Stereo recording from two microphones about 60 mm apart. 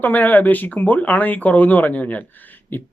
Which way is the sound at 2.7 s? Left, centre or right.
Left.